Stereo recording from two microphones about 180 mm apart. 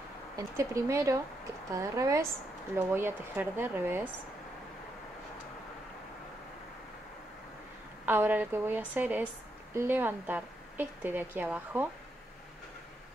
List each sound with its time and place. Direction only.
0.4 s a woman's voice: 15° right (ahead or behind)
8.0 s a woman's voice: 10° right (ahead or behind)